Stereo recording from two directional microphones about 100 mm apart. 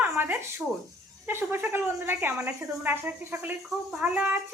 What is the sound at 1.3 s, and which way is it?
Speech, 25° right (ahead or behind).